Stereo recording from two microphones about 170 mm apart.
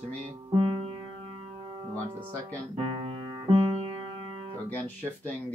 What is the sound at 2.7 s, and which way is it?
Music, 30° right (ahead or behind).